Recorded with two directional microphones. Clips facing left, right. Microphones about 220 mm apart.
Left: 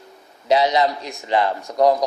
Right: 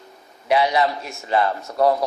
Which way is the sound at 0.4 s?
20° left (ahead or behind).